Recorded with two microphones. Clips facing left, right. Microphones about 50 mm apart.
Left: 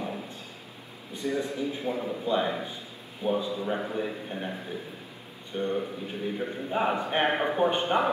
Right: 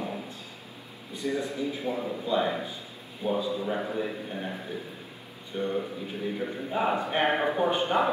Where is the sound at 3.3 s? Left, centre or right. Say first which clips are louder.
Right 1 dB; left.